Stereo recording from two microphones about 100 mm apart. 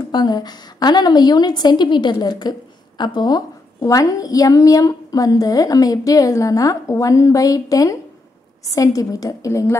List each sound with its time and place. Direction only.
0.1 s a woman's voice: 40° left (ahead or behind)